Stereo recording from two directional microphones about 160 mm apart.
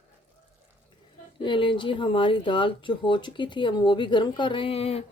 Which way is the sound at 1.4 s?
30° left (ahead or behind).